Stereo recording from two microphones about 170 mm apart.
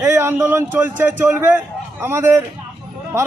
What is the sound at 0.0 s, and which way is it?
A man's voice, 15° right (ahead or behind).